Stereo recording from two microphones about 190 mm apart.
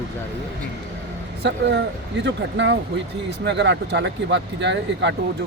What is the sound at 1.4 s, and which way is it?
Speech, 65° right (ahead or behind).